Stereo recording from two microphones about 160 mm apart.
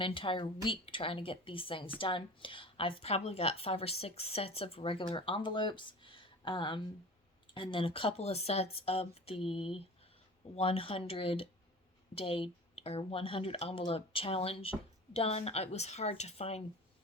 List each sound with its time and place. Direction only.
0.0 s a woman's voice: 30° left (ahead or behind)